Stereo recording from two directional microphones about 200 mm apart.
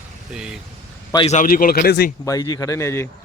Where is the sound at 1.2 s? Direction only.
40° left (ahead or behind).